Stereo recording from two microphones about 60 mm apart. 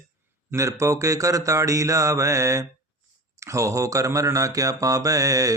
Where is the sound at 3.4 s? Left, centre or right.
Right.